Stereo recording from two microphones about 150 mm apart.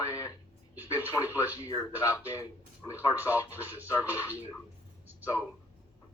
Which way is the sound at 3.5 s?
15° right (ahead or behind).